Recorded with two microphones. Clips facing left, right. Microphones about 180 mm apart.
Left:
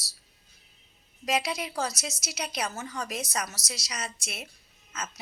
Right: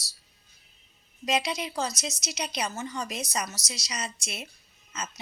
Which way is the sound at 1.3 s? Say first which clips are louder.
Right 1 dB; 5° left (ahead or behind).